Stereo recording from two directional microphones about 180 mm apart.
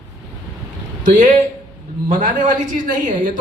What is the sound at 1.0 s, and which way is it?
A man's voice, 45° right (ahead or behind).